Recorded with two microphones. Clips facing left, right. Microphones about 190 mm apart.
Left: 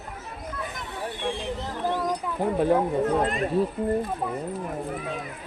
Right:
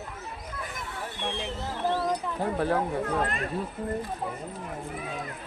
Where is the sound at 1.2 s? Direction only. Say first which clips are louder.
Left 2 dB; 15° left (ahead or behind).